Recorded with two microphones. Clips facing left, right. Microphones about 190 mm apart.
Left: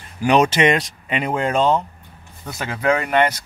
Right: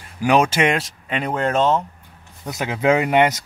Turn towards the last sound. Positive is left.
turn(degrees=-15)  # may be behind; listen again after turning